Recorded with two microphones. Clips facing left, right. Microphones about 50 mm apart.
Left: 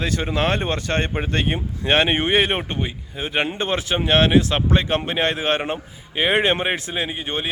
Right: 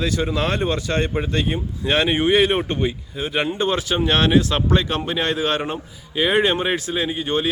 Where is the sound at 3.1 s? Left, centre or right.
Left.